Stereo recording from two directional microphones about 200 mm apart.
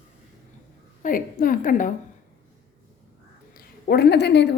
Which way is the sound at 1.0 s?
45° left (ahead or behind).